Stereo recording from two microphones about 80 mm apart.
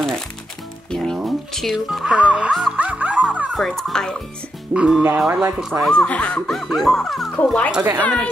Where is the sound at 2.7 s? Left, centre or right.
Centre.